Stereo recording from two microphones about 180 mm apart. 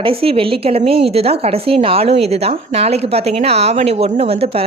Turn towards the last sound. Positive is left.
turn(degrees=-30)  # may be behind; listen again after turning